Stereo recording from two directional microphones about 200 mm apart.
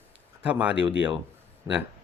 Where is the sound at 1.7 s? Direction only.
15° right (ahead or behind).